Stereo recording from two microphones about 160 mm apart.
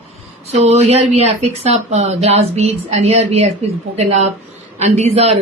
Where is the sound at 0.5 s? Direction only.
45° right (ahead or behind).